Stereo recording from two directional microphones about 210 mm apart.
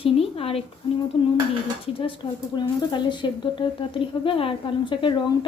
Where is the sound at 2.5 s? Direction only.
20° left (ahead or behind).